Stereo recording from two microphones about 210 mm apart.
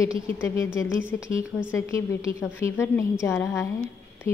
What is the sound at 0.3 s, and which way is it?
Speech, 10° left (ahead or behind).